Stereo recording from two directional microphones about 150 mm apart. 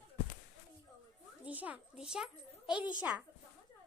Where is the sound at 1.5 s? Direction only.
10° right (ahead or behind).